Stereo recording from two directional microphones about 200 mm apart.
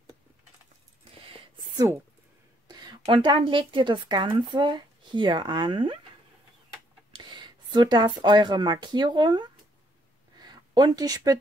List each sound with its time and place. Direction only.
2.7 s a woman's voice: 20° right (ahead or behind)
7.1 s speech: 25° right (ahead or behind)
10.4 s a sound: 20° right (ahead or behind)